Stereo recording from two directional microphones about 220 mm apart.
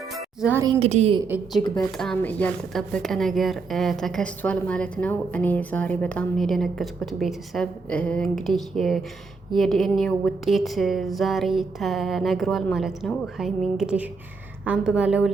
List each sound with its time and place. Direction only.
0.1 s music: centre (ahead or behind)
0.5 s a woman's voice: 20° right (ahead or behind)
2.0 s a woman's voice: 5° left (ahead or behind)